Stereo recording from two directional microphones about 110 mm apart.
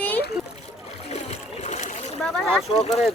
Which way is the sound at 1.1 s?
80° left.